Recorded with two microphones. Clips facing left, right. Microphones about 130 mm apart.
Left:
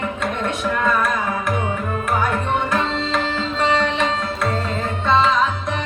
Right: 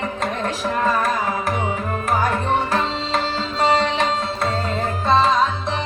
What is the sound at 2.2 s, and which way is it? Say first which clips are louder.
Tabla: right 1 dB; 35° right (ahead or behind).